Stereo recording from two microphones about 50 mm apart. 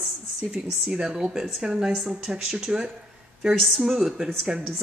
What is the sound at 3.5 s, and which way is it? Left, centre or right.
A woman's voice, centre.